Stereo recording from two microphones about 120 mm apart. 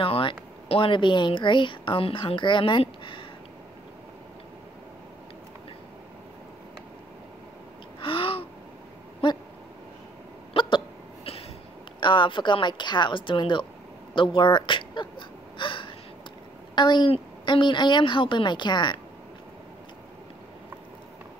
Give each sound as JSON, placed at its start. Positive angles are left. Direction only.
{"t": 0.0, "sound": "speech", "side_deg": 50}
{"t": 8.0, "sound": "gasp", "side_deg": 50}
{"t": 10.5, "sound": "hiccup", "side_deg": 40}
{"t": 12.0, "sound": "speech", "side_deg": 45}
{"t": 14.1, "sound": "gasp", "side_deg": 45}
{"t": 16.7, "sound": "a woman's voice", "side_deg": 40}